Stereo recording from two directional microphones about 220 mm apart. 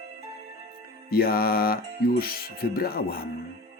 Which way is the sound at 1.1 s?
45° left (ahead or behind).